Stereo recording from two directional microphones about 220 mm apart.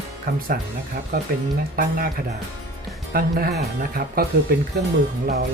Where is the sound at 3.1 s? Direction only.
40° right (ahead or behind).